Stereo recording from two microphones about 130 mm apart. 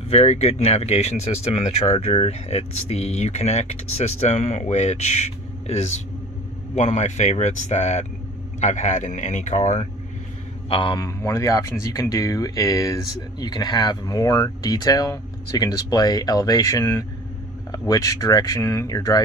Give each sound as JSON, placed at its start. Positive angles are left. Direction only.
{"t": 0.1, "sound": "speech", "side_deg": 55}
{"t": 10.7, "sound": "speech", "side_deg": 40}
{"t": 11.0, "sound": "speech", "side_deg": 25}